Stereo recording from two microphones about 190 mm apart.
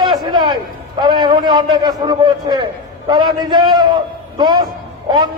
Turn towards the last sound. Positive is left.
turn(degrees=-25)  # may be behind; listen again after turning